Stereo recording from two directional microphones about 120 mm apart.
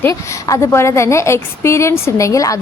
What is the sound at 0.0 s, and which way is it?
A woman's voice, 25° left (ahead or behind).